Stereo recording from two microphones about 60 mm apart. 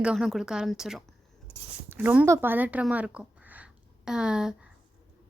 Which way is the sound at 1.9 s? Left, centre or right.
Right.